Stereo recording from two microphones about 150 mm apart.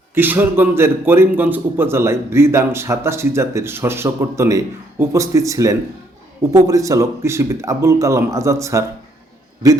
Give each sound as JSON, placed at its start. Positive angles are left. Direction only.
{"t": 0.1, "sound": "a man's voice", "side_deg": -15}